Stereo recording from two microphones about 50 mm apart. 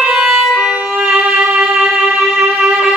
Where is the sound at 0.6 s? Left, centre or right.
Right.